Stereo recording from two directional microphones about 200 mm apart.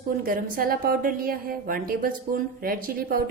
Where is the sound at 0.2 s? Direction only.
45° right (ahead or behind).